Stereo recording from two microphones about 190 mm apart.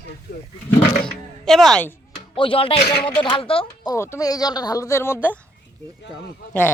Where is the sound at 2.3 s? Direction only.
30° left (ahead or behind).